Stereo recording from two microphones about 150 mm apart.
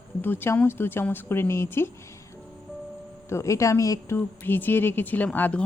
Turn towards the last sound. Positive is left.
turn(degrees=10)  # may be behind; listen again after turning